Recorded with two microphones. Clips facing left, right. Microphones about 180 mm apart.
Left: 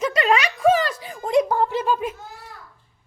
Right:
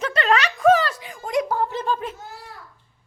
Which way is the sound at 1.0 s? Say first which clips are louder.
Left 4 dB; 35° left (ahead or behind).